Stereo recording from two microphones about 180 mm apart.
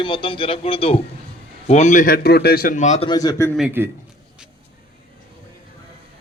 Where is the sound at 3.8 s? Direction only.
10° right (ahead or behind).